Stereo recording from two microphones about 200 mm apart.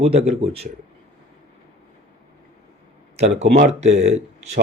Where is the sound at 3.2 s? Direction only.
35° right (ahead or behind).